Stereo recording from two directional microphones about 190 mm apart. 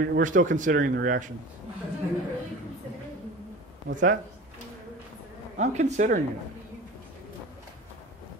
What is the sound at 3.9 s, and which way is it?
Speech, 45° right (ahead or behind).